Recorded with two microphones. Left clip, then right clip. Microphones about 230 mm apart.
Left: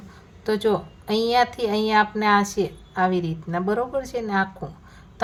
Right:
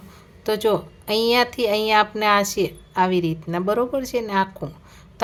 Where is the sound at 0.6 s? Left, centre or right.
Right.